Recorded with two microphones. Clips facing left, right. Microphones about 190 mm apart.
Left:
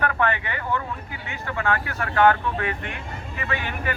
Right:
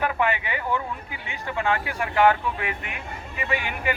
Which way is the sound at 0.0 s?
10° right (ahead or behind).